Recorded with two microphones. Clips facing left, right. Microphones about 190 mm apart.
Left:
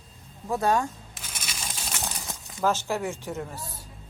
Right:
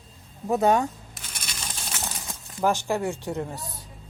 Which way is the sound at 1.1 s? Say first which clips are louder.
Even; 5° left (ahead or behind).